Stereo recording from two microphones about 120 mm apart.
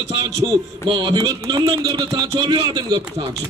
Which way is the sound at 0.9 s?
40° right (ahead or behind).